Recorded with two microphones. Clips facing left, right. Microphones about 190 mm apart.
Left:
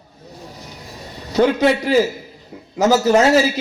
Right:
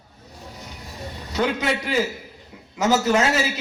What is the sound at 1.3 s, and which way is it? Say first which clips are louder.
A man's voice: left 8 dB; 40° left (ahead or behind).